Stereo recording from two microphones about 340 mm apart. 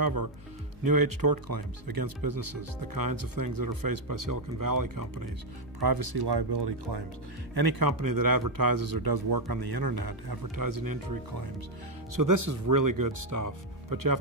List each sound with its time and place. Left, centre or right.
0.0 s speech: right
5.8 s speech: right
7.5 s a man's voice: right
12.2 s speech: right